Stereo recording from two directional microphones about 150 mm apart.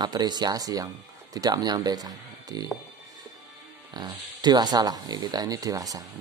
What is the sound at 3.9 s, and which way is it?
Speech, 30° right (ahead or behind).